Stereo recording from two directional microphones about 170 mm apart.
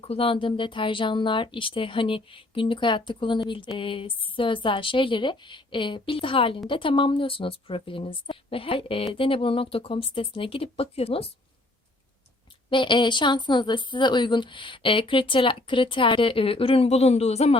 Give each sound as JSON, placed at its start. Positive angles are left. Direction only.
{"t": 0.0, "sound": "a woman's voice", "side_deg": 30}
{"t": 12.7, "sound": "a woman's voice", "side_deg": 30}